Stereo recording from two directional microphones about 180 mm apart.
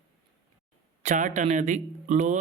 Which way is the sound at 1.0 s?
45° right (ahead or behind).